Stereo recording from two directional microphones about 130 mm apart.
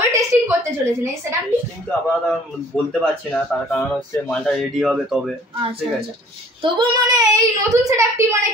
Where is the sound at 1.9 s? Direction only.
10° left (ahead or behind).